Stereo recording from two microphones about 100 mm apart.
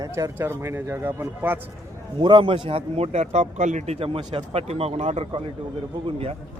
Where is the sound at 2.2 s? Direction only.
55° right (ahead or behind).